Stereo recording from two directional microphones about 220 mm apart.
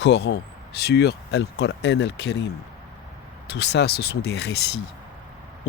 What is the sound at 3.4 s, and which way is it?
Speech, 50° left (ahead or behind).